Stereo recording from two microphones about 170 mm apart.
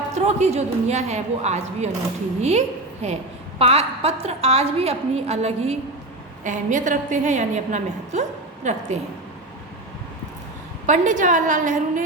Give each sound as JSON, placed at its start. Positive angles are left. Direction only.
{"t": 0.1, "sound": "a woman's voice", "side_deg": -40}
{"t": 10.8, "sound": "a woman's voice", "side_deg": -45}